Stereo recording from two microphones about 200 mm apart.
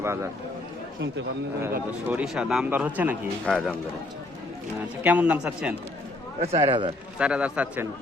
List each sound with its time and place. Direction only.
0.0 s speech: 15° right (ahead or behind)
2.0 s speech: 5° right (ahead or behind)
3.4 s a man's voice: 5° left (ahead or behind)
5.0 s speech: 5° right (ahead or behind)
6.4 s a man's voice: 30° right (ahead or behind)
7.2 s a man's voice: 5° right (ahead or behind)